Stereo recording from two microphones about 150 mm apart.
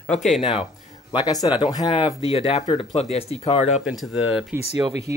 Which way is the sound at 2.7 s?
45° left (ahead or behind).